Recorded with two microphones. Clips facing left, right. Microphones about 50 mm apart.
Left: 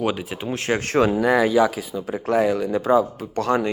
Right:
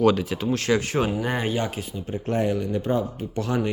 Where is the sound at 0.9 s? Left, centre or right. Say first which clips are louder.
Left 7 dB; left.